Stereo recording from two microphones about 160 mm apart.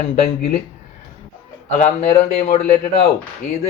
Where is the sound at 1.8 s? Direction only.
45° left (ahead or behind).